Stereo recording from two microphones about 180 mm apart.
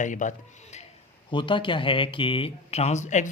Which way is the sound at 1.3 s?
25° left (ahead or behind).